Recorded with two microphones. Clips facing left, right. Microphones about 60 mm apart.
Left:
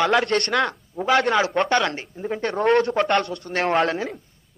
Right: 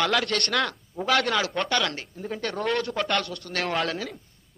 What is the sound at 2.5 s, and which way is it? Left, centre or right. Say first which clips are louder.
Speech: left 9 dB; left.